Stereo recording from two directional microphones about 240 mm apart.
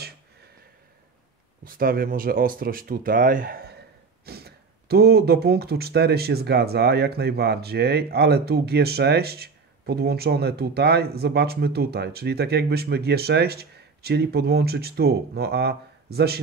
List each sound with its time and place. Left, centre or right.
1.6 s speech: right